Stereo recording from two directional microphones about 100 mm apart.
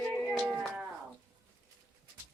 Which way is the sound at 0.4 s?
10° right (ahead or behind).